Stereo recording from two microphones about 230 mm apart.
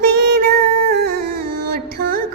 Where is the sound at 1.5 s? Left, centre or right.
Right.